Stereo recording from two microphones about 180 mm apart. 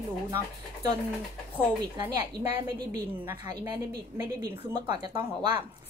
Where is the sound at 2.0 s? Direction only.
10° right (ahead or behind).